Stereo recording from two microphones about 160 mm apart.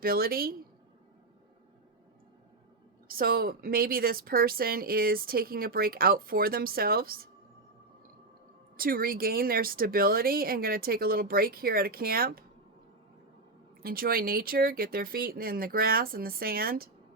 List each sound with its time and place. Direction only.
0.0 s a woman's voice: 70° right (ahead or behind)
3.1 s a woman's voice: 65° right (ahead or behind)
8.7 s a woman's voice: 65° right (ahead or behind)
13.8 s a woman's voice: 65° right (ahead or behind)